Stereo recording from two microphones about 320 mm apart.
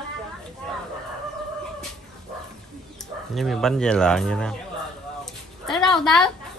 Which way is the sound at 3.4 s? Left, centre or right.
Centre.